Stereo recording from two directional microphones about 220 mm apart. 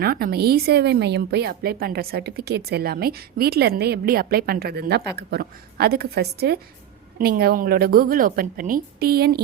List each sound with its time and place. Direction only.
0.0 s a woman's voice: 45° right (ahead or behind)